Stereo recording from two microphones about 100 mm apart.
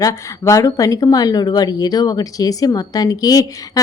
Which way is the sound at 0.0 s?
35° left (ahead or behind).